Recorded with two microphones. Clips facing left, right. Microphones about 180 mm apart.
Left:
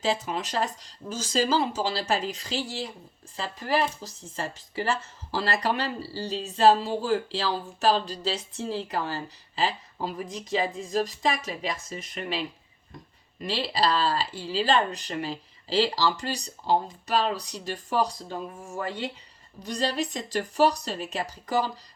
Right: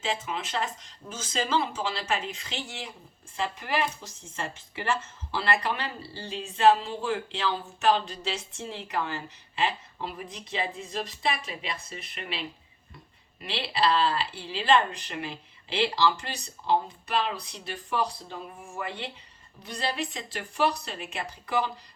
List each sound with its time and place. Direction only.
0.0 s speech: 35° left (ahead or behind)
13.4 s speech: 40° left (ahead or behind)